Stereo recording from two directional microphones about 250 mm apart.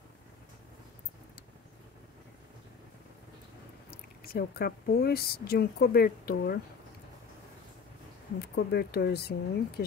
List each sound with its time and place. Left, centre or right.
4.2 s speech: left
8.4 s speech: left